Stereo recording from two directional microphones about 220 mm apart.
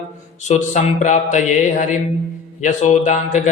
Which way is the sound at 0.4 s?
35° left (ahead or behind).